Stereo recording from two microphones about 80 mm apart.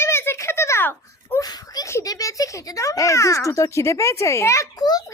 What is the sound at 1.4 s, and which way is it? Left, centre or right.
A child's voice, left.